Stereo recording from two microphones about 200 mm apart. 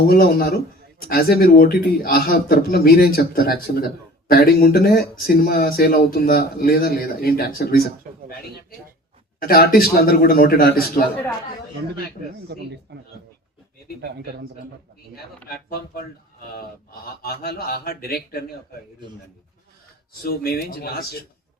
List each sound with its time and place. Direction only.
0.1 s a man's voice: 50° left (ahead or behind)
9.4 s a man's voice: 50° left (ahead or behind)
12.5 s speech: 55° right (ahead or behind)
14.0 s speech: 55° right (ahead or behind)
17.2 s a man's voice: 50° left (ahead or behind)
20.2 s a man's voice: 50° left (ahead or behind)